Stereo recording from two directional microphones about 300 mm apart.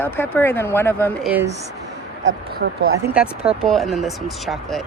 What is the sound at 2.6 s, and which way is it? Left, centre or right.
Speech, right.